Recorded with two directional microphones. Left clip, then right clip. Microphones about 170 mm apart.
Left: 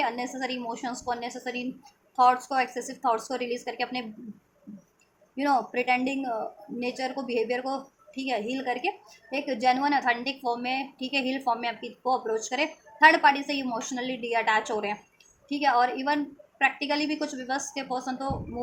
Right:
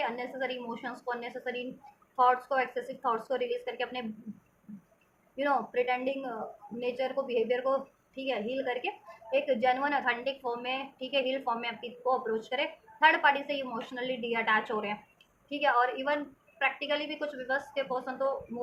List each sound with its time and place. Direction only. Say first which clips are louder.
0.0 s a woman's voice: left 4 dB; 55° left (ahead or behind)
5.4 s a woman's voice: left 3 dB; 55° left (ahead or behind)